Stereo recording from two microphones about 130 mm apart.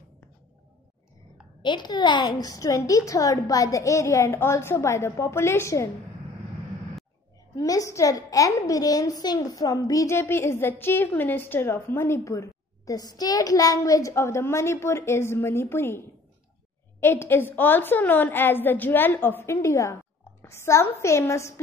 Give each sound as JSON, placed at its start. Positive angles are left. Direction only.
{"t": 1.6, "sound": "a child's voice", "side_deg": 35}
{"t": 7.5, "sound": "a child's voice", "side_deg": 25}